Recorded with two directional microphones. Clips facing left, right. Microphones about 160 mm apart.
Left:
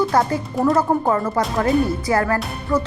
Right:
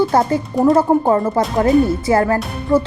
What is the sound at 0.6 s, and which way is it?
Speech, 25° right (ahead or behind).